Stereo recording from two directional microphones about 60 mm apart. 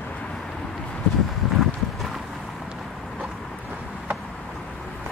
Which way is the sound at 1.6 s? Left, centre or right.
Centre.